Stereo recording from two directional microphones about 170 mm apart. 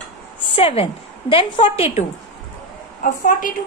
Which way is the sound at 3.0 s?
50° left (ahead or behind).